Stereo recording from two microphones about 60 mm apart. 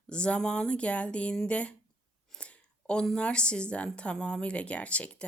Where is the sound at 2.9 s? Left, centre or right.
Centre.